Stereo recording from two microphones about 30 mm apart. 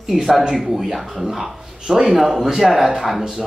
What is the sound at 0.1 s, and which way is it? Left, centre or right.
A man's voice, centre.